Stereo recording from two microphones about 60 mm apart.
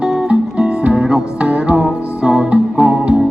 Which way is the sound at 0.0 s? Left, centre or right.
Centre.